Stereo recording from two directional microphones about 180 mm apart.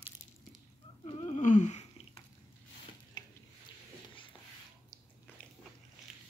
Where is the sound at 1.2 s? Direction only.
40° left (ahead or behind).